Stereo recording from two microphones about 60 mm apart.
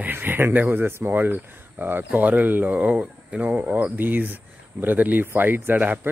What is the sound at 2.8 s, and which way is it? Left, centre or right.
Speech, centre.